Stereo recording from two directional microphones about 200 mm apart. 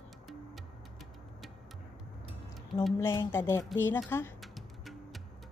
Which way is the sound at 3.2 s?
10° left (ahead or behind).